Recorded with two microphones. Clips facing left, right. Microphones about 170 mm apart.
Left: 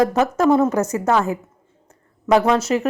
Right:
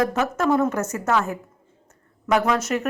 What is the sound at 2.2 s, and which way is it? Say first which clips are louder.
Speech: left 5 dB; 30° left (ahead or behind).